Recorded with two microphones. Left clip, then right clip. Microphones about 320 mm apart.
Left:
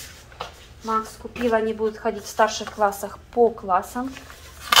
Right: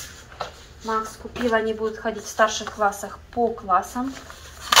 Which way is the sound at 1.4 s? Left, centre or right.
Centre.